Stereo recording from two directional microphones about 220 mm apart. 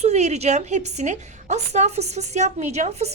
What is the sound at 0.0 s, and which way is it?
A woman's voice, 30° right (ahead or behind).